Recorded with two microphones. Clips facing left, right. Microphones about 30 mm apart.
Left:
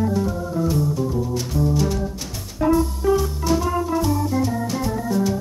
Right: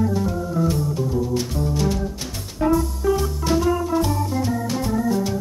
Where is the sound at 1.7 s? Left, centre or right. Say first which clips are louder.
Right 1 dB; centre.